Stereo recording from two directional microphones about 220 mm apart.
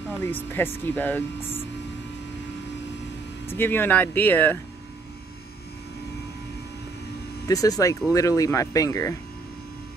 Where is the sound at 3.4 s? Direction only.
10° left (ahead or behind).